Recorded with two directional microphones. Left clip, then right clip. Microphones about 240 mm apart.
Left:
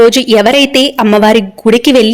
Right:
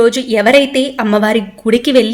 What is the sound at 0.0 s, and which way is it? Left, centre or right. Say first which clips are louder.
Speech: left 5 dB; left.